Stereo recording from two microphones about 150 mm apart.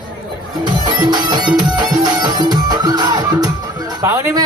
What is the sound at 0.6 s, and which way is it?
Music, 30° right (ahead or behind).